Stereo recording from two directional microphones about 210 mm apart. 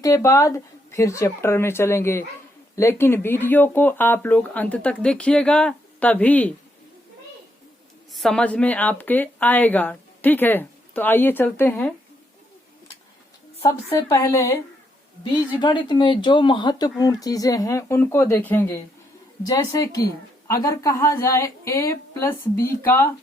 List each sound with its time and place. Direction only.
0.0 s speech: 15° left (ahead or behind)
8.1 s speech: centre (ahead or behind)
13.7 s speech: 15° left (ahead or behind)